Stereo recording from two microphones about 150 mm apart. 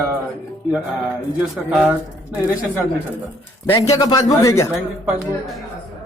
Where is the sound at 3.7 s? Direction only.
25° left (ahead or behind).